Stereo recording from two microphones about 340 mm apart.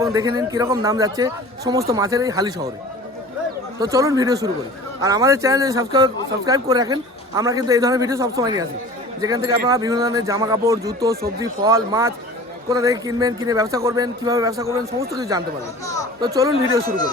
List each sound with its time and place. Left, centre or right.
0.0 s a man's voice: centre
3.8 s a man's voice: centre